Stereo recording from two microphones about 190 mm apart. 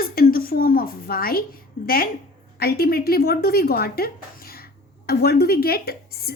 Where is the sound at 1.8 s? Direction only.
50° left (ahead or behind).